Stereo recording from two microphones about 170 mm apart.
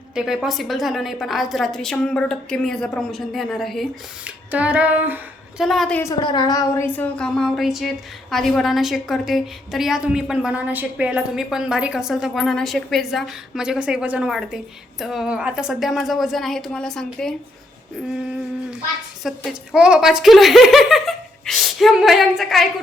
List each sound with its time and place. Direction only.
0.1 s a woman's voice: 5° right (ahead or behind)
4.5 s female singing: 10° right (ahead or behind)
5.6 s a woman's voice: centre (ahead or behind)
6.0 s a woman's voice: 20° left (ahead or behind); by 17.3 s 5° left (ahead or behind)
19.2 s a woman's voice: 5° right (ahead or behind)